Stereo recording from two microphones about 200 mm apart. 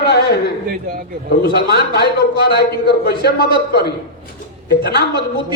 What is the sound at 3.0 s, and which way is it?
Speech, 55° left (ahead or behind).